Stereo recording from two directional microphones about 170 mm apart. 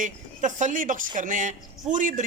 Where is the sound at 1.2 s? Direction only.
50° right (ahead or behind).